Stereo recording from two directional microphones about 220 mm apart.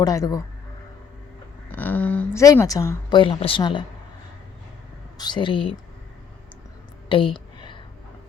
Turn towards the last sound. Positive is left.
turn(degrees=20)  # may be behind; listen again after turning